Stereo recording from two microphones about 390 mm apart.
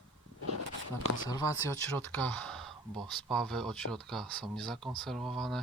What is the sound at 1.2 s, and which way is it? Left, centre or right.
Speech, centre.